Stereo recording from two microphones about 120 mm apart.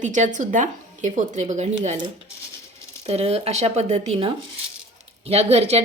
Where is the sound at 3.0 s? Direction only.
60° right (ahead or behind).